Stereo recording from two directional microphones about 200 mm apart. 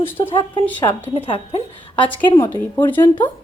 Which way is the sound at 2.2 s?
15° left (ahead or behind).